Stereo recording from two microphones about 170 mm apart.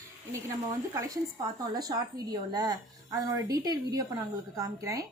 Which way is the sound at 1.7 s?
20° right (ahead or behind).